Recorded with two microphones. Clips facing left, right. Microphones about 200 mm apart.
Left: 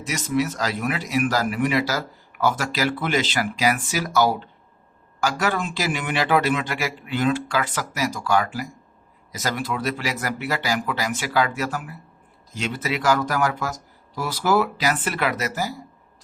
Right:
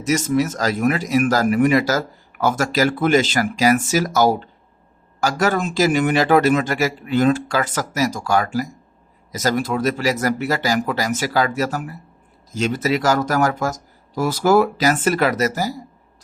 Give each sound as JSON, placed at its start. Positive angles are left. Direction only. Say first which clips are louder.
{"t": 0.0, "sound": "speech", "louder": "right 5 dB", "side_deg": -45}